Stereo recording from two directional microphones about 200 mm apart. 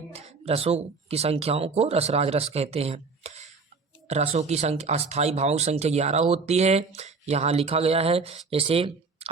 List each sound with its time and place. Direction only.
0.1 s speech: 30° right (ahead or behind)